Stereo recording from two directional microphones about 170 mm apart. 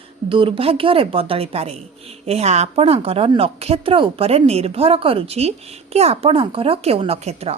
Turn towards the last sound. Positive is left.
turn(degrees=-40)  # may be behind; listen again after turning